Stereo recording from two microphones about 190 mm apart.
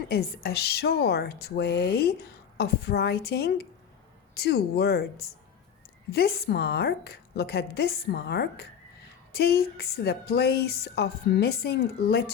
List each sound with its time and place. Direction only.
0.1 s a woman's voice: 55° left (ahead or behind)
6.1 s a woman's voice: 55° left (ahead or behind)